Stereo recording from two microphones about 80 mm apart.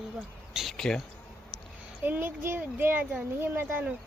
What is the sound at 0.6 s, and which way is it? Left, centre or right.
Speech, centre.